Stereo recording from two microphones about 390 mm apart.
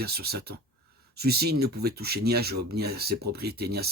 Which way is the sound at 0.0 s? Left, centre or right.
Right.